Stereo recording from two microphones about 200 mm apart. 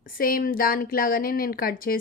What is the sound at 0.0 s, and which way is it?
A woman's voice, 45° left (ahead or behind).